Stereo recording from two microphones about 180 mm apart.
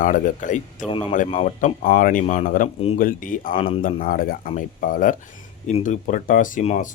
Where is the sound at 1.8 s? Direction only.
50° left (ahead or behind).